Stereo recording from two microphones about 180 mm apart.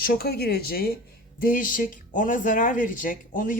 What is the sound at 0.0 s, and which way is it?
Speech, 55° left (ahead or behind).